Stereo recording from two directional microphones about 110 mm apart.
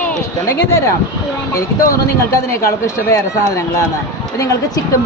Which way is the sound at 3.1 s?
30° left (ahead or behind).